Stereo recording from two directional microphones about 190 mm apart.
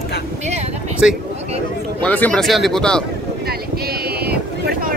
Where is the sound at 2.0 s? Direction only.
5° left (ahead or behind).